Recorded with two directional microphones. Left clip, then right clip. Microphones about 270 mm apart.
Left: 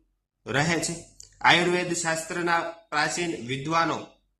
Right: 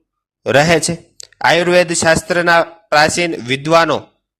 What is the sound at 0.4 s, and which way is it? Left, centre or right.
Speech, right.